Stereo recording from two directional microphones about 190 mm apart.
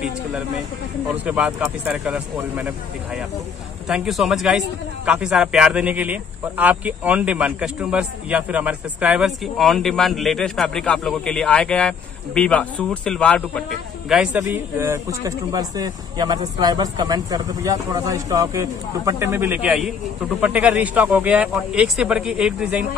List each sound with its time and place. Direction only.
1.1 s speech: 5° right (ahead or behind)
3.9 s a man's voice: 5° right (ahead or behind)
14.8 s a man's voice: 15° right (ahead or behind)